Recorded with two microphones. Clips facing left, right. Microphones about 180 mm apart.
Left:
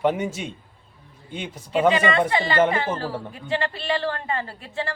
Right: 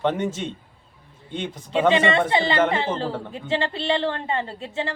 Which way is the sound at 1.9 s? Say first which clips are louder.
Right 1 dB; 25° right (ahead or behind).